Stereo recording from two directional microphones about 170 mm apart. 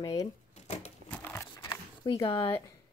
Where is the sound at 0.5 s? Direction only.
40° left (ahead or behind).